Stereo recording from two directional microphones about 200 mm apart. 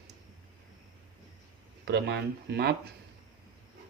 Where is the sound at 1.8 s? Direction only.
55° right (ahead or behind).